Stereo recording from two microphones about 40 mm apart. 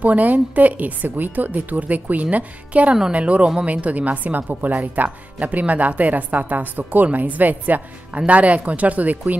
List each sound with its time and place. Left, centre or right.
0.0 s a woman's voice: right